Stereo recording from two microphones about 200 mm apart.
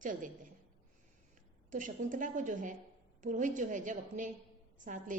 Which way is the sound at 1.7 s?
40° right (ahead or behind).